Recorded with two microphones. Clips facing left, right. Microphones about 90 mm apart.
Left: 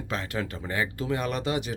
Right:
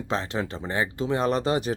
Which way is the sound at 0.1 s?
25° right (ahead or behind).